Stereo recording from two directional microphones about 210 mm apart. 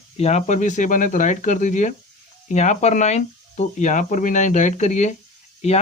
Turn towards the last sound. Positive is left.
turn(degrees=30)  # may be behind; listen again after turning